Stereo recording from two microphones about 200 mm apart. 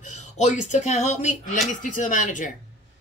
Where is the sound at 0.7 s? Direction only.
35° left (ahead or behind).